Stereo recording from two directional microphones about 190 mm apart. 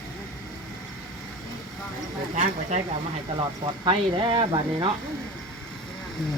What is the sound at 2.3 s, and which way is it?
Speech, 40° right (ahead or behind).